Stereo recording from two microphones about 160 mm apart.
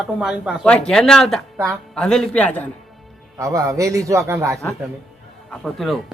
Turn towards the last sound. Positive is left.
turn(degrees=0)  # may be behind; listen again after turning